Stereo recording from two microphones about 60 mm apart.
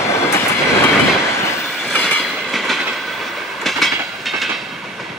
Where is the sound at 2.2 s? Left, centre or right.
Centre.